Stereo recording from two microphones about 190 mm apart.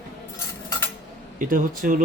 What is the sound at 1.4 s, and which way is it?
Speech, 45° right (ahead or behind).